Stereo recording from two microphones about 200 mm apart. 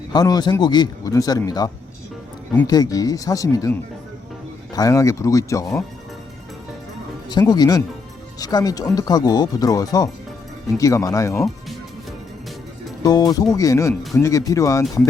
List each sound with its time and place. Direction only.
0.1 s speech: 20° left (ahead or behind)
7.3 s speech: 20° left (ahead or behind)
13.0 s speech: 20° left (ahead or behind)